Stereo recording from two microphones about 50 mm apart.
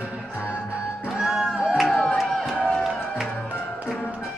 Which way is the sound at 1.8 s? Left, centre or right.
Centre.